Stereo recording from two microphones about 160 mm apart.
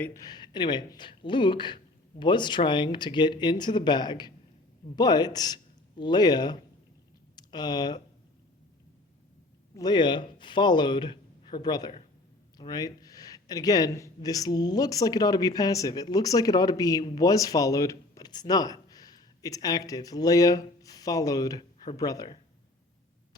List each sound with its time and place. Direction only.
0.0 s speech: 20° left (ahead or behind)
9.7 s speech: 25° left (ahead or behind)